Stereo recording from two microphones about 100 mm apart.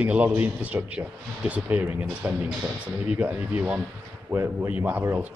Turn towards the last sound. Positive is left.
turn(degrees=-20)  # may be behind; listen again after turning